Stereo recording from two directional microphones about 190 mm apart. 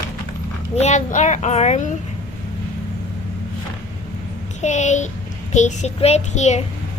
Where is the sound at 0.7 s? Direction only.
40° left (ahead or behind).